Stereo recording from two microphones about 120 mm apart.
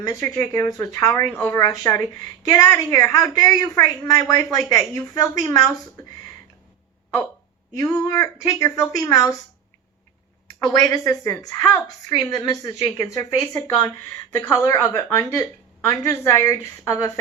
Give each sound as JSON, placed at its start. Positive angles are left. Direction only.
{"t": 0.1, "sound": "a woman's voice", "side_deg": 25}
{"t": 7.8, "sound": "a woman's voice", "side_deg": 25}
{"t": 10.6, "sound": "a woman's voice", "side_deg": 30}